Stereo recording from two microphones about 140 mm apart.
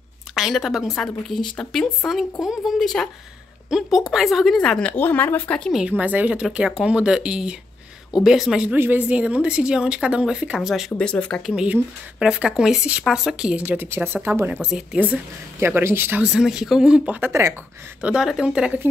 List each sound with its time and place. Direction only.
0.3 s speech: centre (ahead or behind)
5.7 s speech: 5° right (ahead or behind)
11.0 s speech: 10° left (ahead or behind)
11.5 s speech: 5° right (ahead or behind)
17.3 s speech: 20° right (ahead or behind)
18.0 s speech: 5° right (ahead or behind)